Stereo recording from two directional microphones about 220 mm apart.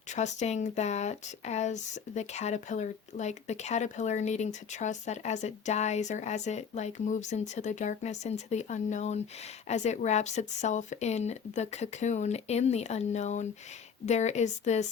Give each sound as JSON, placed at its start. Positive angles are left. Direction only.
{"t": 0.2, "sound": "speech", "side_deg": 30}